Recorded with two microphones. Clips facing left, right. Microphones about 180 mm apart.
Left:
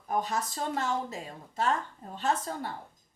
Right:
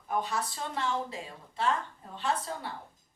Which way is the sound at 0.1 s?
45° left (ahead or behind).